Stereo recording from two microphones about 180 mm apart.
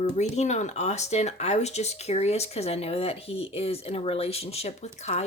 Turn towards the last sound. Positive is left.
turn(degrees=40)  # may be behind; listen again after turning